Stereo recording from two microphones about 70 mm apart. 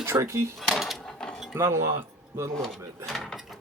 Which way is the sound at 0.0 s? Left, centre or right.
Right.